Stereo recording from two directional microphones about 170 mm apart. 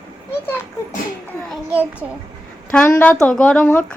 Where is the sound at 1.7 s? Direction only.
10° right (ahead or behind).